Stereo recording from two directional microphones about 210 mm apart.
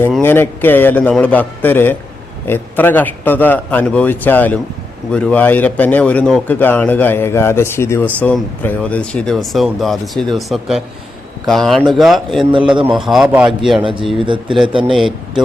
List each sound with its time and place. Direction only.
0.0 s a man's voice: 10° left (ahead or behind)
14.2 s speech: 25° right (ahead or behind)
14.8 s a man's voice: centre (ahead or behind)